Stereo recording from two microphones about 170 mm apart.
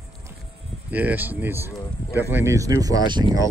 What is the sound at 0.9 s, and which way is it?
Speech, 10° right (ahead or behind).